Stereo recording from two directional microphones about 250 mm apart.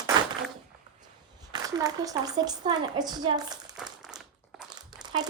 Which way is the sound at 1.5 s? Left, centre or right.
Centre.